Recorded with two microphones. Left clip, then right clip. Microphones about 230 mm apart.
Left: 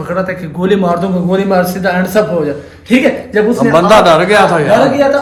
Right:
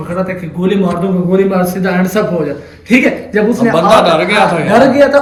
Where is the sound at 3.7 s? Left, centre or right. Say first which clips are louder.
Left 2 dB; left.